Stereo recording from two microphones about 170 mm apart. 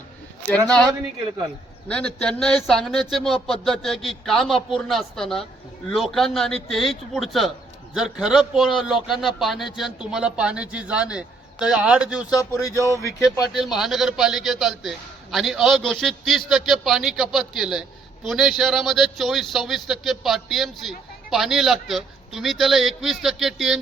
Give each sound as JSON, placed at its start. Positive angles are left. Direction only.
{"t": 0.5, "sound": "speech", "side_deg": 5}
{"t": 1.9, "sound": "speech", "side_deg": 5}
{"t": 12.3, "sound": "a sound", "side_deg": 20}
{"t": 13.5, "sound": "speech", "side_deg": 0}